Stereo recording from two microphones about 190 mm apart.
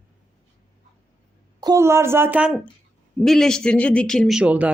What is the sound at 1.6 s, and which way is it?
Speech, 15° right (ahead or behind).